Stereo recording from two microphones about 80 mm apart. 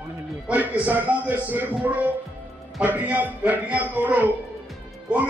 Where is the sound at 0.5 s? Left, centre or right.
Right.